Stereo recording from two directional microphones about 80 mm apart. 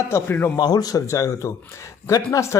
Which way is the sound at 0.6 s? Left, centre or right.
Left.